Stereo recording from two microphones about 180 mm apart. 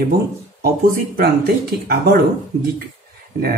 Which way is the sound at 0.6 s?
55° right (ahead or behind).